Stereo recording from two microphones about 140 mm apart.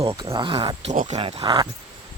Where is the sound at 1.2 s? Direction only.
45° right (ahead or behind).